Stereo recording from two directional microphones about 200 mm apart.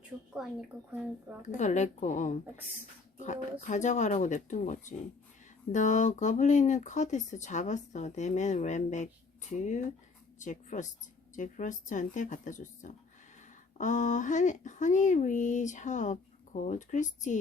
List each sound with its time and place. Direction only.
0.4 s speech: centre (ahead or behind)
1.4 s speech: 35° left (ahead or behind)